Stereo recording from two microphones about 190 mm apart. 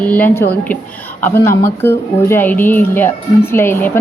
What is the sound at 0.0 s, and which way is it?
Speech, 10° left (ahead or behind).